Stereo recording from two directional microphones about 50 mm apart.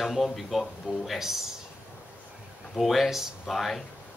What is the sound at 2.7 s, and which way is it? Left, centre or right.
Speech, centre.